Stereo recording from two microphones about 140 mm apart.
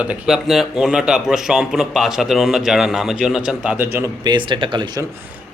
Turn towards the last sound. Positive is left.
turn(degrees=-35)  # may be behind; listen again after turning